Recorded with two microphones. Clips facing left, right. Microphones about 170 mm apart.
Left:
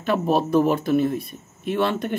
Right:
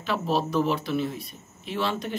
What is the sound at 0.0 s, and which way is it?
A man's voice, 55° left (ahead or behind).